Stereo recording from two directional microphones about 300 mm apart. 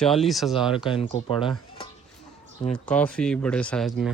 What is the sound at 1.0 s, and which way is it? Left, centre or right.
Speech, centre.